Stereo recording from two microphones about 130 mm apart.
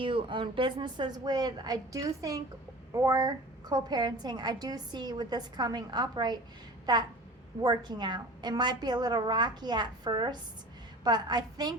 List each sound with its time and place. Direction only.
0.0 s a woman's voice: 40° right (ahead or behind)